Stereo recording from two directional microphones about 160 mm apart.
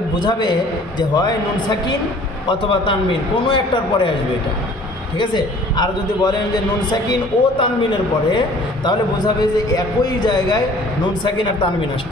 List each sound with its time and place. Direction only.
0.1 s a man's voice: 30° left (ahead or behind)
5.2 s a man's voice: 25° left (ahead or behind)